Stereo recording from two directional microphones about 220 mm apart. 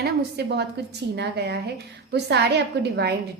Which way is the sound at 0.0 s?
50° right (ahead or behind).